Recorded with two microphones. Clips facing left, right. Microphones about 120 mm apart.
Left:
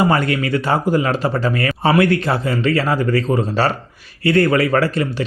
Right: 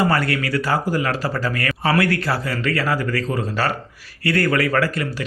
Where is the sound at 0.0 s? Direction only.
20° left (ahead or behind).